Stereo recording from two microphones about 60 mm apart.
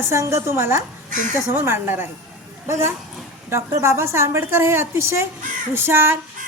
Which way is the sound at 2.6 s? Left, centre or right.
Right.